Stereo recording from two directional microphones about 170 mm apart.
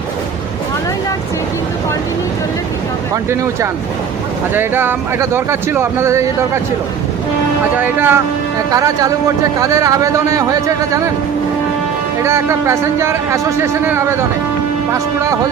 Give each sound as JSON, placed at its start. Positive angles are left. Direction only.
{"t": 3.2, "sound": "speech", "side_deg": -15}
{"t": 7.8, "sound": "speech", "side_deg": -10}
{"t": 12.2, "sound": "speech", "side_deg": -15}